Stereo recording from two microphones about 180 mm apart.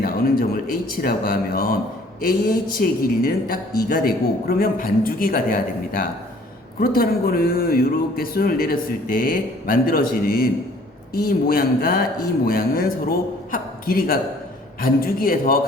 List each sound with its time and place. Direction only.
0.0 s a man's voice: 55° left (ahead or behind)